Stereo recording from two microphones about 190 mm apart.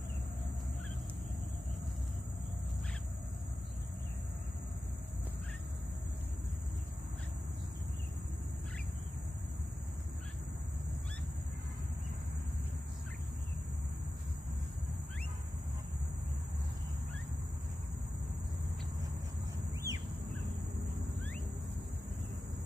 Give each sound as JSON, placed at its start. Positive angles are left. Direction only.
{"t": 19.7, "sound": "bird", "side_deg": -15}